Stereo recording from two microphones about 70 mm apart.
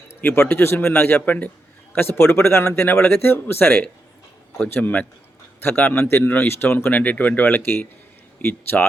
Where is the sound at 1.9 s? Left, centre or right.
Left.